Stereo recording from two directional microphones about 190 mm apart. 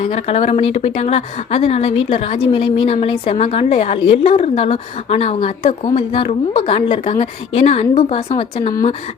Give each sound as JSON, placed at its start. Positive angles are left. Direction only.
{"t": 0.0, "sound": "a woman's voice", "side_deg": 30}